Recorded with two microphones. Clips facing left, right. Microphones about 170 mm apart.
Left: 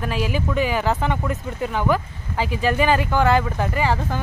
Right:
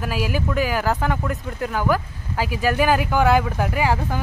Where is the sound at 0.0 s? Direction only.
5° right (ahead or behind).